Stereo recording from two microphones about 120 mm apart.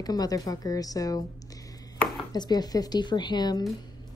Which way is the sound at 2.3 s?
35° left (ahead or behind).